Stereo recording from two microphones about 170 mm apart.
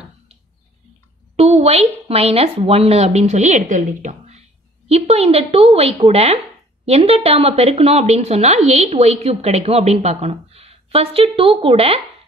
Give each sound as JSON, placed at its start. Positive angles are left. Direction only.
{"t": 1.3, "sound": "speech", "side_deg": -35}